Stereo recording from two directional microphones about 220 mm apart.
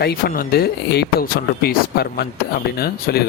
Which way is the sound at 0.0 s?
45° left (ahead or behind).